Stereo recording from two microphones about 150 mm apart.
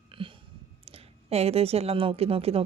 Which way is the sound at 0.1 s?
35° right (ahead or behind).